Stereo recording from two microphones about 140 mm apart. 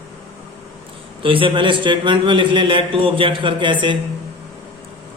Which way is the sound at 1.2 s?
40° right (ahead or behind).